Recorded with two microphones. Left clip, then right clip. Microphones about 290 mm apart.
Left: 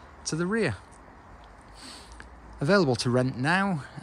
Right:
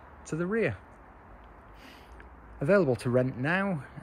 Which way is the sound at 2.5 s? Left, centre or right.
Centre.